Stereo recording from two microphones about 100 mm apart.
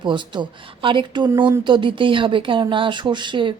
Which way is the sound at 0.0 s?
50° right (ahead or behind).